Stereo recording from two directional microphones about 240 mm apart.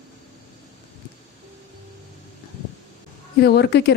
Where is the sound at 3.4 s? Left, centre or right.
Left.